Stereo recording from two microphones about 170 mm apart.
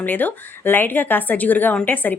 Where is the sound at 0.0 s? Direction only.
10° left (ahead or behind).